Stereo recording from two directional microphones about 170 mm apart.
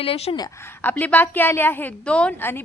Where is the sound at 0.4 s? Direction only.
15° left (ahead or behind).